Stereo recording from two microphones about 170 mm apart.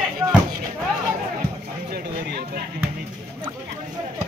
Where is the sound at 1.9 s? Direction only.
65° right (ahead or behind).